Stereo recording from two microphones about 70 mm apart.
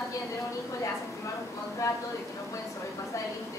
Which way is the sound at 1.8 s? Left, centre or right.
Left.